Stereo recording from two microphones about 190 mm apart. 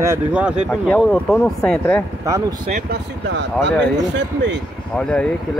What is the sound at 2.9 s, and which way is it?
Speech, 65° right (ahead or behind).